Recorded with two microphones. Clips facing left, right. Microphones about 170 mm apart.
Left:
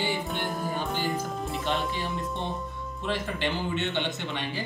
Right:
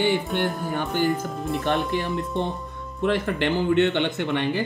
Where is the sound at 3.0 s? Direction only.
55° right (ahead or behind).